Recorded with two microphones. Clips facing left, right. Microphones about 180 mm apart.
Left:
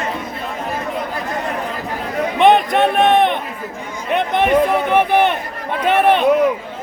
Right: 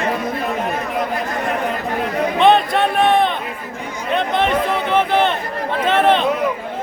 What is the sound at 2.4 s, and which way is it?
Run, 15° left (ahead or behind).